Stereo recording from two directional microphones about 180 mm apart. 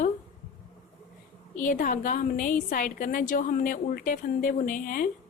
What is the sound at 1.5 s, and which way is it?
A woman's voice, 45° left (ahead or behind).